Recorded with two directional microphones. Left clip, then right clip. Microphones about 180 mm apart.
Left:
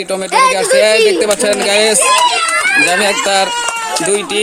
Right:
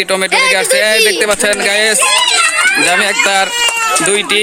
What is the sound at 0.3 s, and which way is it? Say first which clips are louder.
Speech: left 3 dB; 50° left (ahead or behind).